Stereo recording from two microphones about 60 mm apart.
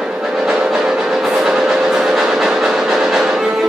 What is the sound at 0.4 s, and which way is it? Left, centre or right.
Music, centre.